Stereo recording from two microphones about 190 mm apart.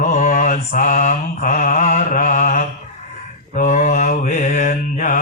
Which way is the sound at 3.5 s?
40° left (ahead or behind).